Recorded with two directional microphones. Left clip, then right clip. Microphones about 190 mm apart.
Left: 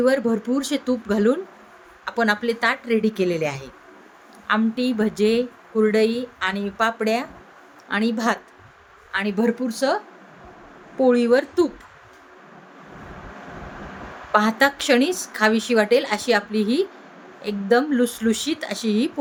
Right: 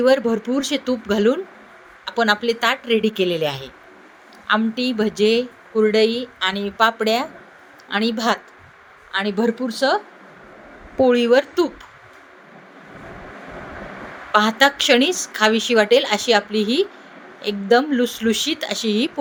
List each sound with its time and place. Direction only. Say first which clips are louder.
0.0 s a woman's voice: right 3 dB; 10° right (ahead or behind)
14.3 s a woman's voice: right 3 dB; 15° right (ahead or behind)